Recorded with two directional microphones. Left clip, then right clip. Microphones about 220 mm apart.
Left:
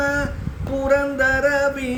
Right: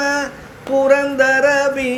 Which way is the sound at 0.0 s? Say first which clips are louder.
Right 3 dB; 15° left (ahead or behind).